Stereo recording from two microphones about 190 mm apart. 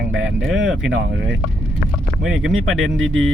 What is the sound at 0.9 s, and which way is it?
Speech, 70° right (ahead or behind).